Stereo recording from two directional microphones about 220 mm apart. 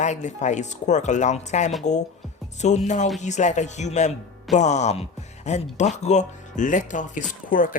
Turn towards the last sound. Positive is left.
turn(degrees=40)  # may be behind; listen again after turning